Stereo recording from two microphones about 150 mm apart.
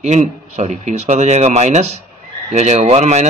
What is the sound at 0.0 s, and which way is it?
Speech, 50° right (ahead or behind).